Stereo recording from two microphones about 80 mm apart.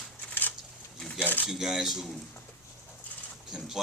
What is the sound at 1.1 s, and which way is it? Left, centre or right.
Speech, left.